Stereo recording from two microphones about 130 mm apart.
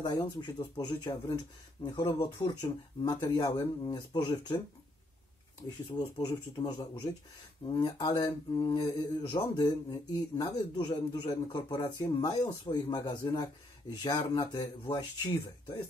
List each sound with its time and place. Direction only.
0.0 s mantra: 35° left (ahead or behind)
5.9 s mantra: 35° left (ahead or behind)